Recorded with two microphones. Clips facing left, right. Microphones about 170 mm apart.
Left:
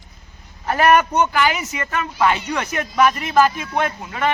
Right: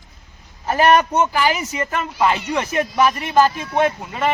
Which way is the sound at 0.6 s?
30° right (ahead or behind).